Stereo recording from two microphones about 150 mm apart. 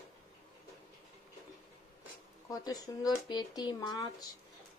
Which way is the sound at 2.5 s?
25° left (ahead or behind).